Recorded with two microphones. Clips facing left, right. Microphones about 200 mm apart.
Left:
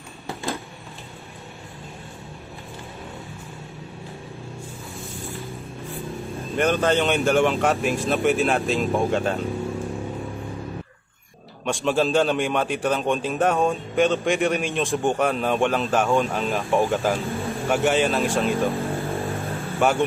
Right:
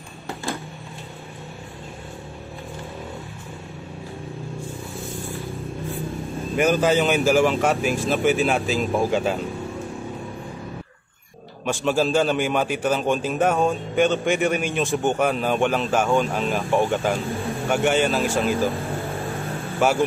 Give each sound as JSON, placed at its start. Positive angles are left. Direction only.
{"t": 6.5, "sound": "a man's voice", "side_deg": -5}
{"t": 11.6, "sound": "a man's voice", "side_deg": 0}
{"t": 19.0, "sound": "vehicle", "side_deg": 0}